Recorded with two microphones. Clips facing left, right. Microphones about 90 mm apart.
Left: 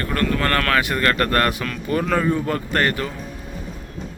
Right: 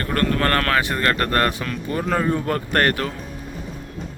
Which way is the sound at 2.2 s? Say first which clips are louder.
Left 1 dB; 50° right (ahead or behind).